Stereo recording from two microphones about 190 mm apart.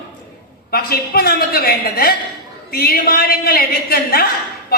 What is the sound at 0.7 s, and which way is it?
A woman's voice, 55° left (ahead or behind).